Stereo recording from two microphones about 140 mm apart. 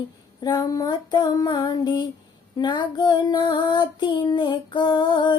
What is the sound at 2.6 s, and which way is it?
Child singing, 30° left (ahead or behind).